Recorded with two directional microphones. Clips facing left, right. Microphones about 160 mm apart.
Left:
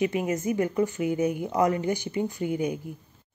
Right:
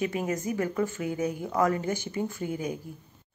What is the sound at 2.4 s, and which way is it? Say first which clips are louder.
Speech: left 4 dB; 40° right (ahead or behind).